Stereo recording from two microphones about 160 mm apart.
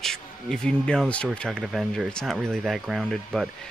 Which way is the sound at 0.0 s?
5° left (ahead or behind).